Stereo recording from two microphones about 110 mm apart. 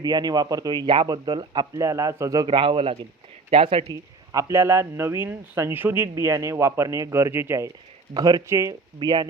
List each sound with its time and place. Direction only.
0.0 s speech: 35° right (ahead or behind)
1.8 s speech: 30° right (ahead or behind)
2.5 s speech: 55° right (ahead or behind)
3.8 s speech: 30° right (ahead or behind)
8.1 s speech: 40° right (ahead or behind)
8.4 s speech: 25° right (ahead or behind)
9.0 s speech: 40° right (ahead or behind)